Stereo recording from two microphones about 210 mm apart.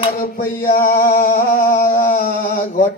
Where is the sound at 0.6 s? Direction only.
40° left (ahead or behind).